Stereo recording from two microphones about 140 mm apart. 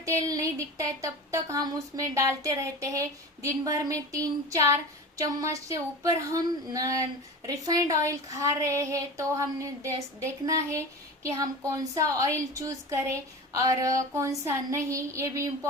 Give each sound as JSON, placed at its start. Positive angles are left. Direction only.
{"t": 0.0, "sound": "a woman's voice", "side_deg": -20}